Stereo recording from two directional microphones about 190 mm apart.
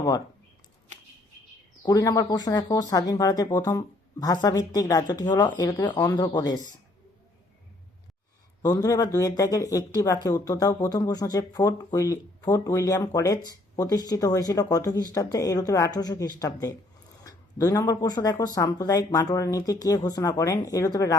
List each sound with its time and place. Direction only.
1.8 s speech: 20° left (ahead or behind)
8.6 s speech: 20° left (ahead or behind)